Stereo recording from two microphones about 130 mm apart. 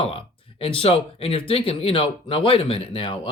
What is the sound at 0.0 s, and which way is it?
Speech, 45° left (ahead or behind).